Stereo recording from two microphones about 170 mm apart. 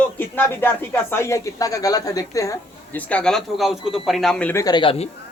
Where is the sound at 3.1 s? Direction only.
5° left (ahead or behind).